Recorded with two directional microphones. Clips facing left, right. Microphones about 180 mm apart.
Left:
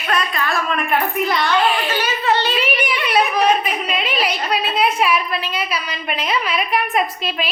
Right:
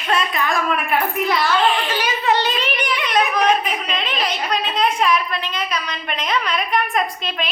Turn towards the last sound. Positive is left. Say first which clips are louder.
# left 2 dB
turn(degrees=5)  # may be behind; listen again after turning